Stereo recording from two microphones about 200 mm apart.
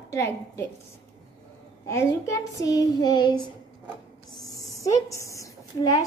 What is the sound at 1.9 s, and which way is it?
Speech, 15° left (ahead or behind).